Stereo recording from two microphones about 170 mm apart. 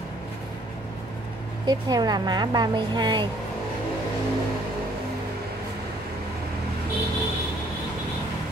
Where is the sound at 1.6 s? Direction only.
25° right (ahead or behind).